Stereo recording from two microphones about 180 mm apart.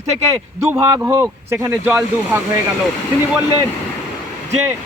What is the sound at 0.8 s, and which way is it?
Speech, 15° right (ahead or behind).